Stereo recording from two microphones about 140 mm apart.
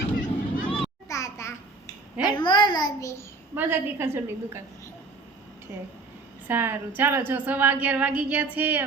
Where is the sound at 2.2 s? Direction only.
30° left (ahead or behind).